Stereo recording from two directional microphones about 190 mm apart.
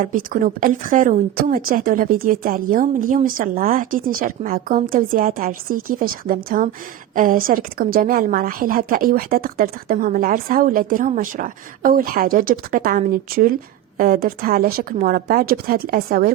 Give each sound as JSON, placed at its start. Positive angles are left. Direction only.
{"t": 0.0, "sound": "a woman's voice", "side_deg": -45}